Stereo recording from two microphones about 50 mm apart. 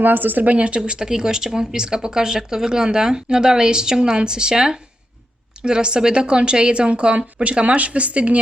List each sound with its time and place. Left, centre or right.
0.0 s a woman's voice: right